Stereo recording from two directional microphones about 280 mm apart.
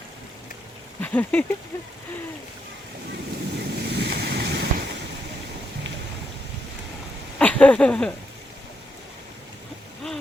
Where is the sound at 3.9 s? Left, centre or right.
Right.